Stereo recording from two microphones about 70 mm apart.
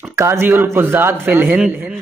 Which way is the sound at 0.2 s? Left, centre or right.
Right.